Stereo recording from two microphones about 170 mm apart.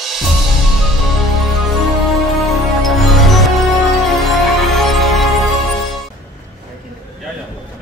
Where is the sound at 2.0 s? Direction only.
Centre (ahead or behind).